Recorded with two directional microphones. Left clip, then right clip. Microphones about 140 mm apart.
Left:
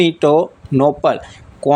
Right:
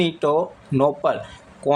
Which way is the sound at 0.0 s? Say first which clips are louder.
Left 7 dB; 40° left (ahead or behind).